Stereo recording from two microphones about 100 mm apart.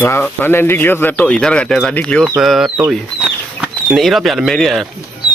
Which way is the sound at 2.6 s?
20° right (ahead or behind).